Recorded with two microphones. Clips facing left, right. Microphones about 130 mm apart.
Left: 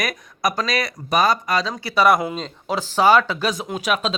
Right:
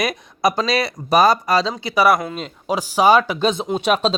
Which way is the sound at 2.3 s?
10° right (ahead or behind).